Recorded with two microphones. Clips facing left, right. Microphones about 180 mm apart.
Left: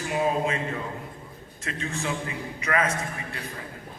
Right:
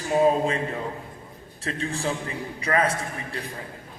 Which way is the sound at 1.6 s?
35° right (ahead or behind).